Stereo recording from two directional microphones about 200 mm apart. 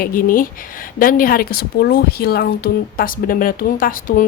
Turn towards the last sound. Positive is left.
turn(degrees=45)  # may be behind; listen again after turning